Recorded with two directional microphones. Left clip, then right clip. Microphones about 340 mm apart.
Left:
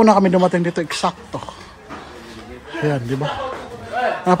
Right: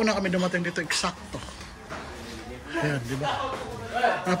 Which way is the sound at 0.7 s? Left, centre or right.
Centre.